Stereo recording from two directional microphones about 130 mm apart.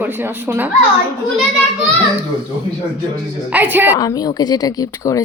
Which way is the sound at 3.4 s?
15° right (ahead or behind).